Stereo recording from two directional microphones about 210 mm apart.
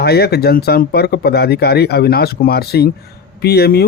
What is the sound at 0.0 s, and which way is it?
Speech, 50° left (ahead or behind).